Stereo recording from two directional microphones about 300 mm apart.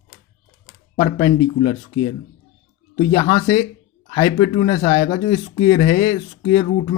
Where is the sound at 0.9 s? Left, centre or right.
Centre.